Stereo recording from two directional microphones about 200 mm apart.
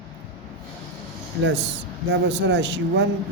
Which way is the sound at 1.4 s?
60° right (ahead or behind).